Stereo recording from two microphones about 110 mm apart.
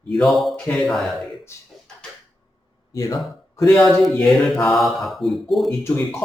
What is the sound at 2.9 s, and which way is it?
Speech, 30° left (ahead or behind).